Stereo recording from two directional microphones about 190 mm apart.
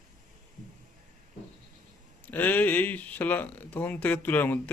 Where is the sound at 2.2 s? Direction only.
10° left (ahead or behind).